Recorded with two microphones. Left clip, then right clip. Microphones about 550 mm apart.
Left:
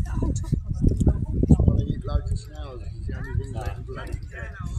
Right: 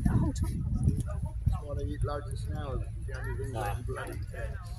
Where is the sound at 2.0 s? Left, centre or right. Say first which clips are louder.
Left 1 dB; right.